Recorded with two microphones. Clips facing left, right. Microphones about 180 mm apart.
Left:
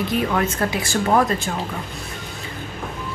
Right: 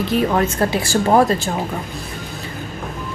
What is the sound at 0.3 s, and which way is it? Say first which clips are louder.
Speech: right 4 dB; 35° right (ahead or behind).